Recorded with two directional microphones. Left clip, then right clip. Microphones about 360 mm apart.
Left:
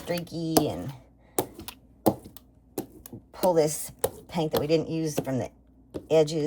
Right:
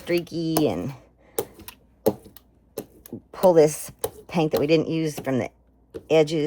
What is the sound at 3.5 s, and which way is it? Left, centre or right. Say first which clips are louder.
A woman's voice: right 7 dB; centre.